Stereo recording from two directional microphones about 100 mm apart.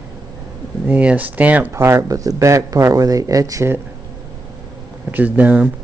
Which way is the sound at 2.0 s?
35° right (ahead or behind).